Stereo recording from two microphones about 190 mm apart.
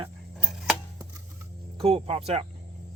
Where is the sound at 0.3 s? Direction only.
Centre (ahead or behind).